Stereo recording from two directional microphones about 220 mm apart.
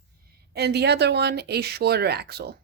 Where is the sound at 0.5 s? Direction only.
50° right (ahead or behind).